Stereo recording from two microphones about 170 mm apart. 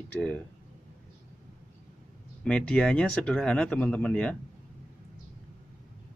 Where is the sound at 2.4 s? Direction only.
5° left (ahead or behind).